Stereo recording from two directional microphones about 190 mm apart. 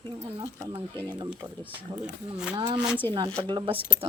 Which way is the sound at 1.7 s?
5° right (ahead or behind).